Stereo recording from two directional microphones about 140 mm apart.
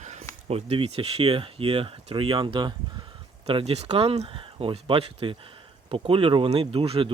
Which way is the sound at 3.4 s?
45° right (ahead or behind).